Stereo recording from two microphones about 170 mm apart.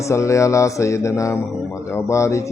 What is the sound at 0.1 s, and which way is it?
Speech, 15° left (ahead or behind).